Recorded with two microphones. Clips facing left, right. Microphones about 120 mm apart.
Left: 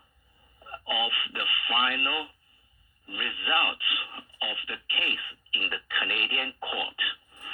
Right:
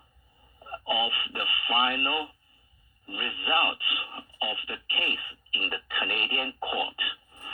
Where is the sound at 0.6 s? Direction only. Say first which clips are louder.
Right 2 dB; 30° right (ahead or behind).